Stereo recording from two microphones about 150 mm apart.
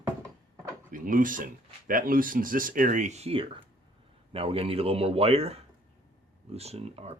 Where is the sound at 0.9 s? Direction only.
65° right (ahead or behind); by 7.2 s 45° right (ahead or behind).